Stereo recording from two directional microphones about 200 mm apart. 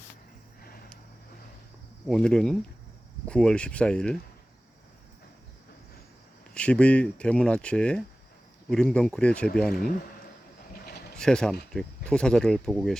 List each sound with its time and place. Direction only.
2.0 s speech: 5° left (ahead or behind)
6.5 s speech: 5° left (ahead or behind)
10.7 s a sound: 50° left (ahead or behind)
11.2 s speech: 5° left (ahead or behind)